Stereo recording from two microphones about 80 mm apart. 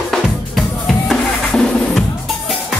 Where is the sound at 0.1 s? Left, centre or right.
Centre.